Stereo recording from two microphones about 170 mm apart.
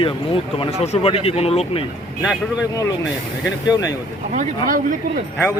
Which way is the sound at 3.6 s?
20° left (ahead or behind).